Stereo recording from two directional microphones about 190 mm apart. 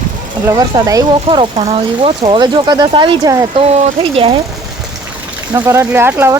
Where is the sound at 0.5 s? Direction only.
20° right (ahead or behind).